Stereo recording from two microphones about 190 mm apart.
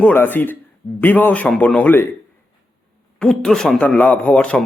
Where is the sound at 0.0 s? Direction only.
10° left (ahead or behind).